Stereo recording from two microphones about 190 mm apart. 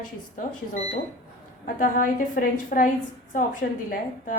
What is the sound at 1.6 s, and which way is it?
A woman's voice, 45° left (ahead or behind).